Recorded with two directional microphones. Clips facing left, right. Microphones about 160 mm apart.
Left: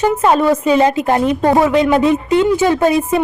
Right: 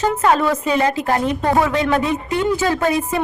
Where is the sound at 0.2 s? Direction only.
20° left (ahead or behind).